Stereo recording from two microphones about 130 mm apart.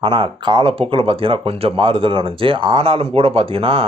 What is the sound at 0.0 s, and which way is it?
Speech, 40° right (ahead or behind).